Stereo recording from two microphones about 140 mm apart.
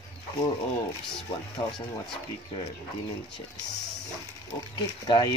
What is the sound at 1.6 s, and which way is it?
Speech, 30° left (ahead or behind).